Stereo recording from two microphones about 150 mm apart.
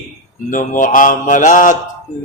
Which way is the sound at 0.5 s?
60° left (ahead or behind).